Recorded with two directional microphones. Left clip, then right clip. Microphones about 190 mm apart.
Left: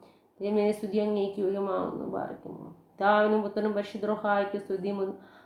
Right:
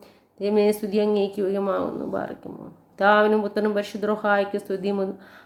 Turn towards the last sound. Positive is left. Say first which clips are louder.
# right 6 dB
turn(degrees=-30)  # may be behind; listen again after turning